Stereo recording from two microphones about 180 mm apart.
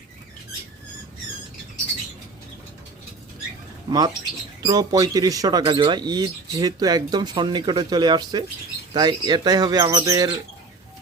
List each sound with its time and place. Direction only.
3.8 s speech: 20° right (ahead or behind)